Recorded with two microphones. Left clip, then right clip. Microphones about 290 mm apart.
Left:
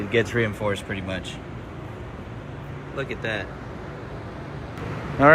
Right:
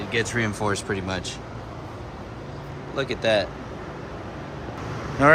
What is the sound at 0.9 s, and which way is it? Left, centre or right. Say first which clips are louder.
Speech: right 3 dB; right.